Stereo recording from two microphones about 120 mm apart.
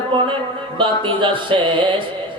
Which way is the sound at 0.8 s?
45° right (ahead or behind).